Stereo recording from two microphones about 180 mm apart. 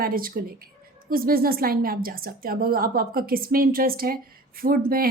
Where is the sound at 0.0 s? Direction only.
55° right (ahead or behind).